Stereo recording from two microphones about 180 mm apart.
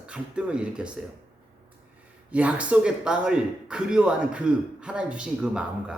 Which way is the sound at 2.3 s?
5° right (ahead or behind).